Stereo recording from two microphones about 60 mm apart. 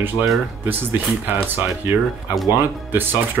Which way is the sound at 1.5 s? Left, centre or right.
Right.